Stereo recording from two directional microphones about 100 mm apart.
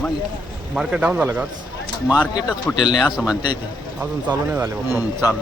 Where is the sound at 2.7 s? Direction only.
45° left (ahead or behind).